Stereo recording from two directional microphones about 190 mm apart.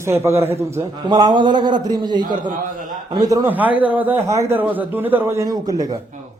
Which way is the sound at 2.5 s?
45° right (ahead or behind).